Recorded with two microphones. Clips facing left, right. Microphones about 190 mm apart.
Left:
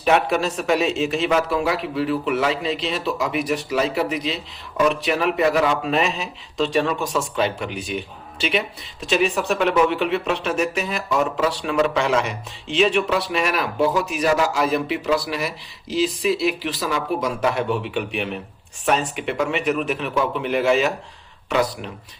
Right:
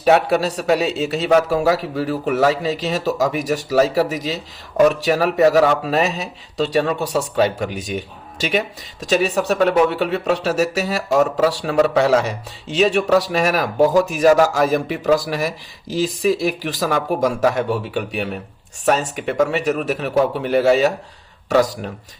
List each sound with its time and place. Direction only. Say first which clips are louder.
0.0 s speech: right 4 dB; 35° right (ahead or behind)